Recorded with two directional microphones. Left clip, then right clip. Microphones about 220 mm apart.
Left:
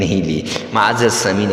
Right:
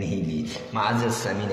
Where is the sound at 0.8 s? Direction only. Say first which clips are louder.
Left 10 dB; 40° left (ahead or behind).